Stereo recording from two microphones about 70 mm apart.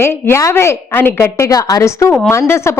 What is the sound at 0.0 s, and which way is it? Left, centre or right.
A woman's voice, left.